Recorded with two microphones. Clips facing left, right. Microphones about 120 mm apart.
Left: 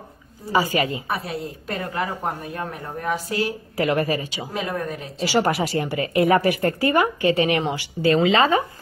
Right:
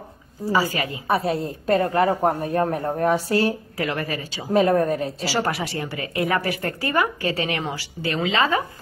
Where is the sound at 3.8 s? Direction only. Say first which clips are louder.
Left 8 dB; 25° left (ahead or behind).